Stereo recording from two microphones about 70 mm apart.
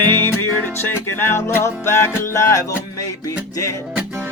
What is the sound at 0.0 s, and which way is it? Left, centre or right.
Music, left.